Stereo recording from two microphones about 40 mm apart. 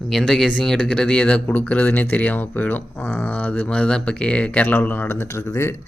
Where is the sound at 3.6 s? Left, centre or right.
Left.